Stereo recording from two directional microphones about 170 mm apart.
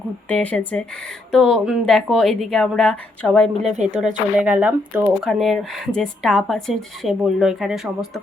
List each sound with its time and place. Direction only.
0.3 s a woman's voice: 5° left (ahead or behind)
3.7 s speech: 45° right (ahead or behind)
4.0 s speech: 10° right (ahead or behind)